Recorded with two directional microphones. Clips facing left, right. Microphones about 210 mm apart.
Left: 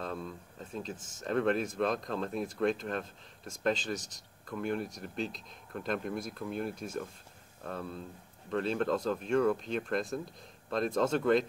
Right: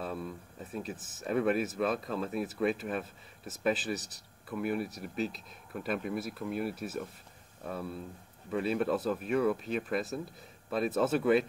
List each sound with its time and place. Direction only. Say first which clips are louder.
0.0 s speech: right 1 dB; 10° right (ahead or behind)